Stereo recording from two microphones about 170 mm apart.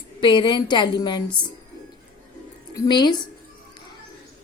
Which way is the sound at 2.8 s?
25° left (ahead or behind).